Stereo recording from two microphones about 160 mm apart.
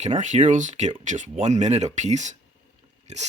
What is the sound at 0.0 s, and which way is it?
Speech, 45° right (ahead or behind).